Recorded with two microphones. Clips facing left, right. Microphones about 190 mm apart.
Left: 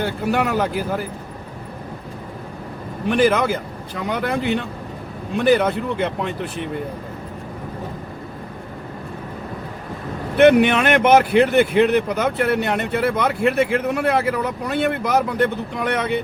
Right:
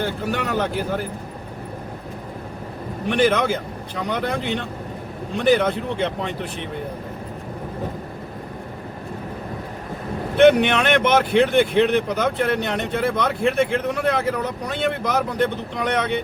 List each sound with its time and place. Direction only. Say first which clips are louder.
0.0 s speech: left 3 dB; 10° left (ahead or behind)
3.1 s a man's voice: left 2 dB; centre (ahead or behind)
10.3 s a man's voice: left 1 dB; 5° left (ahead or behind)